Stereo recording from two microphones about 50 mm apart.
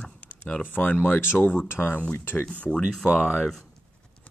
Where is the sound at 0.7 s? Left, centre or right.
Left.